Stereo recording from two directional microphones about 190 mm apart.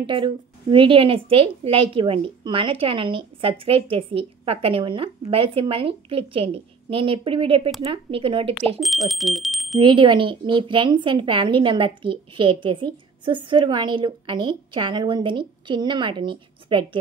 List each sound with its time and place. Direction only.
0.0 s a woman's voice: 25° right (ahead or behind)
8.7 s speech: centre (ahead or behind)
9.8 s a woman's voice: 25° right (ahead or behind)